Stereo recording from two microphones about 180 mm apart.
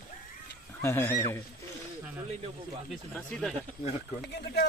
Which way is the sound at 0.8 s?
15° left (ahead or behind).